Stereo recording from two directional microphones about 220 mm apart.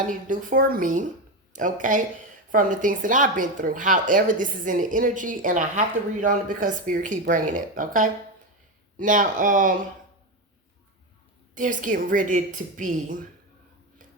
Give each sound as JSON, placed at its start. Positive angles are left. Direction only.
{"t": 0.1, "sound": "speech", "side_deg": -35}
{"t": 11.5, "sound": "speech", "side_deg": -35}